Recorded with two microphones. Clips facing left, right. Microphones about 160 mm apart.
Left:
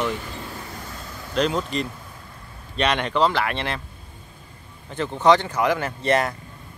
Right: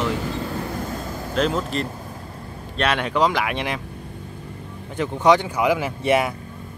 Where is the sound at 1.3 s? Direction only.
Centre (ahead or behind).